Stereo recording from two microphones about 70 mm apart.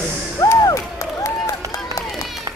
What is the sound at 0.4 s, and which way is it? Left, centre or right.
Music, left.